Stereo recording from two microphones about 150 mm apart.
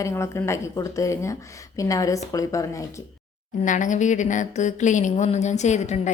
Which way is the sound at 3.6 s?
60° left (ahead or behind).